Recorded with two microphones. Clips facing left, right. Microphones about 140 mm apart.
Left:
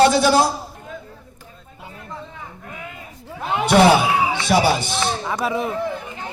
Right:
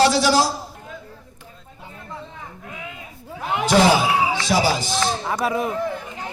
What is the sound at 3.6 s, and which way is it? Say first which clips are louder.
A man's voice: left 2 dB; 60° left (ahead or behind).